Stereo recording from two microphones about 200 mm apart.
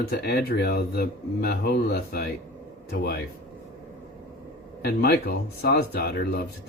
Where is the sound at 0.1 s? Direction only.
50° left (ahead or behind).